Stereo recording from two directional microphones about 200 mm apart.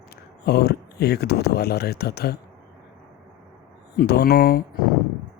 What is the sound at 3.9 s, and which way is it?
Speech, 55° left (ahead or behind).